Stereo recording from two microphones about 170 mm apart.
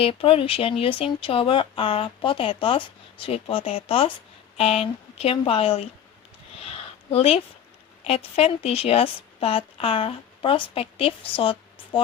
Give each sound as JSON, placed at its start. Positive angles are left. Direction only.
{"t": 0.0, "sound": "speech", "side_deg": 35}
{"t": 6.7, "sound": "a sound", "side_deg": 35}
{"t": 8.0, "sound": "speech", "side_deg": 35}